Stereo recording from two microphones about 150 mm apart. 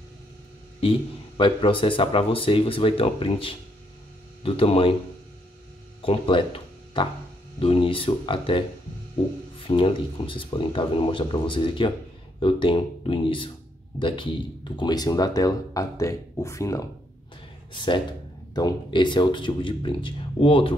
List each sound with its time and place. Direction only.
0.7 s speech: 35° left (ahead or behind)
6.0 s speech: 35° left (ahead or behind)
9.7 s speech: 35° left (ahead or behind)
17.7 s speech: 30° left (ahead or behind)